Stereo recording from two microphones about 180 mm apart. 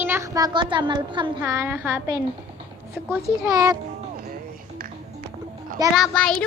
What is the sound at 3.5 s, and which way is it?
Speech, 20° right (ahead or behind).